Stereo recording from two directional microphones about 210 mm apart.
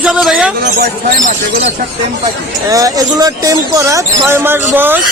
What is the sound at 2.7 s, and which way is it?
Speech, 15° right (ahead or behind).